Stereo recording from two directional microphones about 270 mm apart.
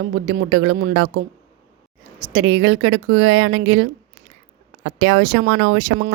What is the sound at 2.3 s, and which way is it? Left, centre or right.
Speech, right.